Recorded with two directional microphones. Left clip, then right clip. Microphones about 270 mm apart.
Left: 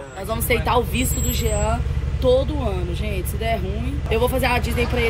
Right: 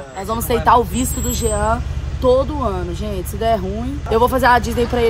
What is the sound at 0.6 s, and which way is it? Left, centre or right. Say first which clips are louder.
Speech: right 7 dB; centre.